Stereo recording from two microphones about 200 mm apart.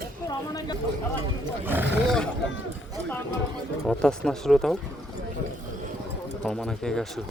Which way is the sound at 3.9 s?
5° left (ahead or behind).